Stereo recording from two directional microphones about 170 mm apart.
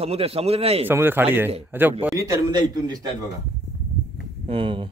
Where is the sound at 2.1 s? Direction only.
20° right (ahead or behind).